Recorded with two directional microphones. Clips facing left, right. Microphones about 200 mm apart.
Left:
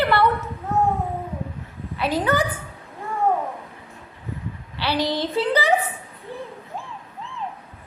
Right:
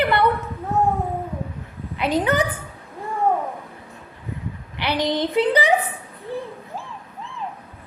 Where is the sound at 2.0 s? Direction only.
20° right (ahead or behind).